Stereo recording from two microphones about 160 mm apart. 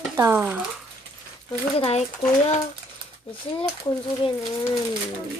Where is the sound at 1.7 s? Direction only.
40° left (ahead or behind).